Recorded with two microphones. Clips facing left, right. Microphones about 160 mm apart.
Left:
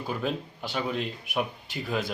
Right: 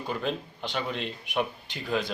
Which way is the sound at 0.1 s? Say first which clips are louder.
Even; 5° left (ahead or behind).